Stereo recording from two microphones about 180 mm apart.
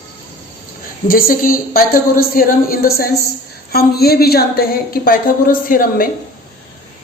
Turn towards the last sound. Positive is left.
turn(degrees=50)  # may be behind; listen again after turning